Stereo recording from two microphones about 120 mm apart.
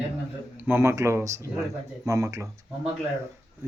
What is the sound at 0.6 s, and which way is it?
Speech, 20° right (ahead or behind).